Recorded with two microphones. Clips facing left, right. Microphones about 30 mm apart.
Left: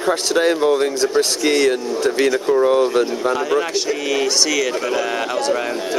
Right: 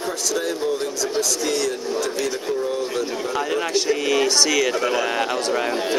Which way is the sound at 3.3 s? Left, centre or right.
Centre.